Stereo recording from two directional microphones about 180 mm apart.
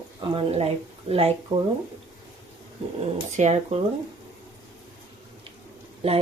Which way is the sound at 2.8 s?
30° right (ahead or behind).